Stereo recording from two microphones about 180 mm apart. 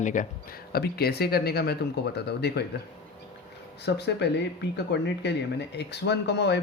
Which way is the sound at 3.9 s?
70° left (ahead or behind).